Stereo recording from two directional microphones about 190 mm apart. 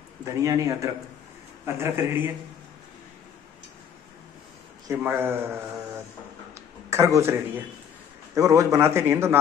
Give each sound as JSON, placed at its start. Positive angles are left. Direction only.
{"t": 0.2, "sound": "speech", "side_deg": -15}
{"t": 4.8, "sound": "a man's voice", "side_deg": -10}
{"t": 8.4, "sound": "speech", "side_deg": -15}